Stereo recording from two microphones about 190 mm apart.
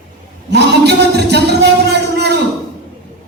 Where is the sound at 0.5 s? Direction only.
60° right (ahead or behind).